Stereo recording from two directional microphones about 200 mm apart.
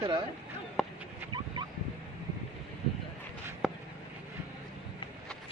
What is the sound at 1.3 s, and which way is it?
Fowl, 20° right (ahead or behind).